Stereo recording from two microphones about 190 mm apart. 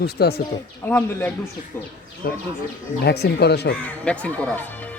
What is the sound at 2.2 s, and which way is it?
Speech, 55° left (ahead or behind).